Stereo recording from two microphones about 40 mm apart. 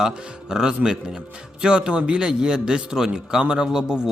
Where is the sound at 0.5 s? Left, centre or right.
Centre.